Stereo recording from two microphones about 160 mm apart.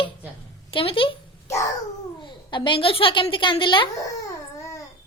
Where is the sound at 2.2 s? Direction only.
30° left (ahead or behind).